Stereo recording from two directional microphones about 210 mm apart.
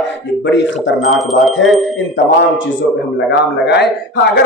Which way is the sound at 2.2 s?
60° left (ahead or behind).